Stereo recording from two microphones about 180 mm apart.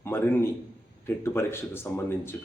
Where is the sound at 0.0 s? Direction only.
15° left (ahead or behind).